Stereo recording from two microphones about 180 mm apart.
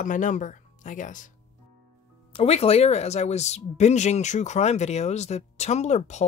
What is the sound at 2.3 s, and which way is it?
Speech, 35° left (ahead or behind).